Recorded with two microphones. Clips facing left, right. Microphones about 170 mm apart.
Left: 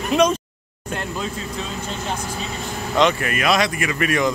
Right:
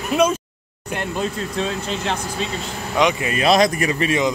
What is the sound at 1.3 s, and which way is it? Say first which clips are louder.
Speech: right 5 dB; 80° right.